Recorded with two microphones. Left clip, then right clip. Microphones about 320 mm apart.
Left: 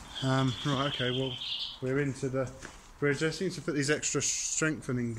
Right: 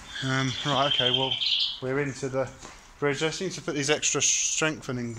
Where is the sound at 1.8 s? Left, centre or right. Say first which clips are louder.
Right 3 dB; right.